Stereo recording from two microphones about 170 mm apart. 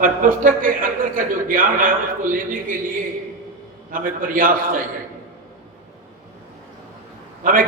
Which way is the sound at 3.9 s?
55° right (ahead or behind).